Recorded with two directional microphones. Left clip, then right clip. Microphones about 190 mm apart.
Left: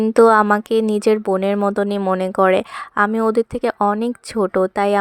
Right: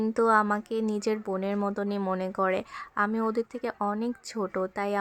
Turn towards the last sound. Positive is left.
turn(degrees=40)  # may be behind; listen again after turning